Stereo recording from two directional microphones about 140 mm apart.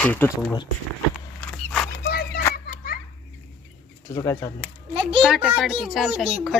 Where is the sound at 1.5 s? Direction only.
5° left (ahead or behind).